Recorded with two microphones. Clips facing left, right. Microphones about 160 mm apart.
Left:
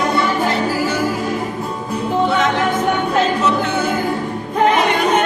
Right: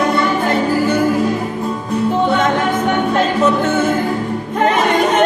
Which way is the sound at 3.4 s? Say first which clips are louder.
Right 3 dB; 50° right (ahead or behind).